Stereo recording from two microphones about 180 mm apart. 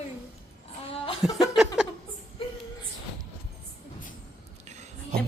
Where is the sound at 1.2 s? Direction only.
Centre (ahead or behind).